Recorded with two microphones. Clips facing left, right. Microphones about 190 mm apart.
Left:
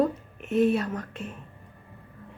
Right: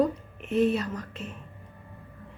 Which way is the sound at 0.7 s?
55° left (ahead or behind).